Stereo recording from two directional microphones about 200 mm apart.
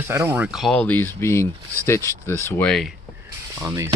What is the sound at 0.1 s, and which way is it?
Speech, 10° right (ahead or behind).